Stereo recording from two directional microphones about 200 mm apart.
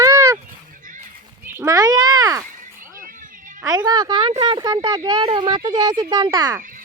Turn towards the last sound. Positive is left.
turn(degrees=-20)  # may be behind; listen again after turning